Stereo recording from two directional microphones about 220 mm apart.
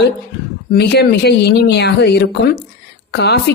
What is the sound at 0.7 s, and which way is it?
A woman's voice, 45° left (ahead or behind).